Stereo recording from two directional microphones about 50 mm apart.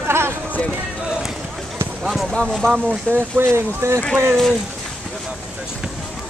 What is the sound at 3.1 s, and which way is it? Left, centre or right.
Speech, right.